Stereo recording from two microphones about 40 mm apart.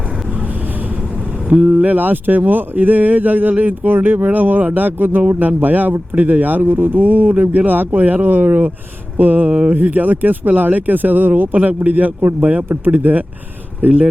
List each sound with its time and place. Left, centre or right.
1.5 s speech: right
2.0 s speech: right